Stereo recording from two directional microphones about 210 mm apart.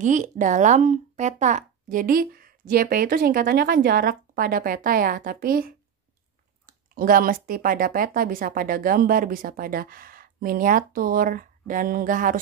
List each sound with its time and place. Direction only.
0.0 s speech: 35° right (ahead or behind)